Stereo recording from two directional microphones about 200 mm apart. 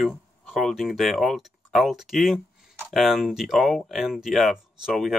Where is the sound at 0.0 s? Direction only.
Centre (ahead or behind).